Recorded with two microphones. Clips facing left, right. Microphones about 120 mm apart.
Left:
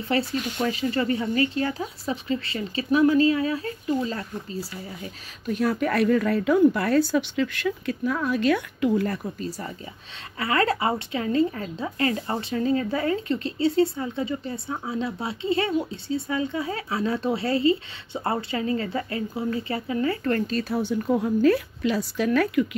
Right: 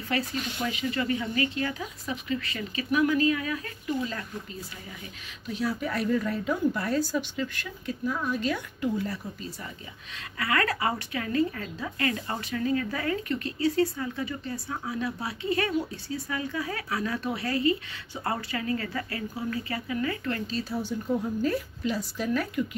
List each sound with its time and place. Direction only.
0.1 s speech: 30° left (ahead or behind)
5.5 s speech: 55° left (ahead or behind)
9.4 s speech: 40° left (ahead or behind)
10.4 s speech: 25° left (ahead or behind)
20.3 s speech: 55° left (ahead or behind); by 22.8 s 85° left